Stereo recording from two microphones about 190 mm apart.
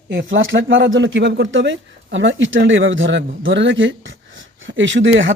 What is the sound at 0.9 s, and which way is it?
Speech, 70° right (ahead or behind).